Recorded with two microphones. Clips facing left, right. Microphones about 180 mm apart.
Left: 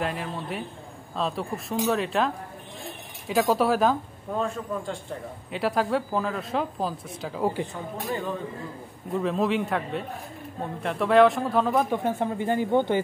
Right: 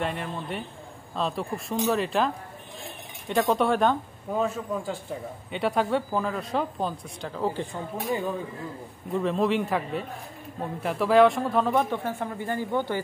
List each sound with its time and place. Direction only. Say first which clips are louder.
0.0 s speech: even; centre (ahead or behind)
7.6 s speech: right 1 dB; 10° right (ahead or behind)
9.1 s speech: even; centre (ahead or behind)
11.9 s speech: left 4 dB; 20° left (ahead or behind)